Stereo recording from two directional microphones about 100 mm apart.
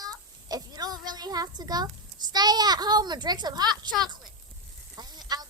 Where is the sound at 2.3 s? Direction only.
45° right (ahead or behind).